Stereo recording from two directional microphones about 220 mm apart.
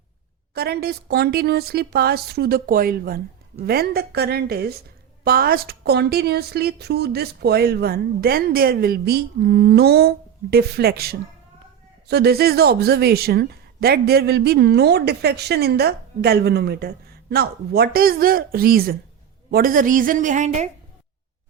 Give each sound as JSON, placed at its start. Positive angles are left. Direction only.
{"t": 0.5, "sound": "a woman's voice", "side_deg": -45}